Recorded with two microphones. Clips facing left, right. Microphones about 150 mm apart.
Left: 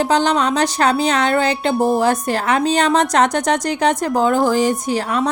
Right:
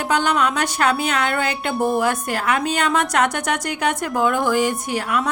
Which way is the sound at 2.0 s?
35° left (ahead or behind).